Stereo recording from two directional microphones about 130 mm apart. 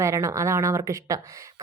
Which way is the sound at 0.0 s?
20° right (ahead or behind).